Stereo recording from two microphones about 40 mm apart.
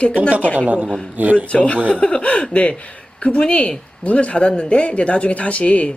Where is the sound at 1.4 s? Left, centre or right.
Left.